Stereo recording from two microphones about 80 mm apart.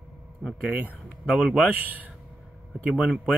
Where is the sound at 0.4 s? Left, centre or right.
Centre.